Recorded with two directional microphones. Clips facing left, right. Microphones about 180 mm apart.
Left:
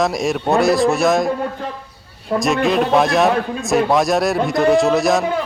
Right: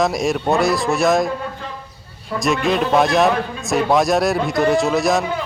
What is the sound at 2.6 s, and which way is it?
A man's voice, centre (ahead or behind).